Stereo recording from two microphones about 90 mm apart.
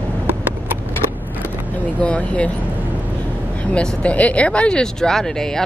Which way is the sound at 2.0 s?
15° left (ahead or behind).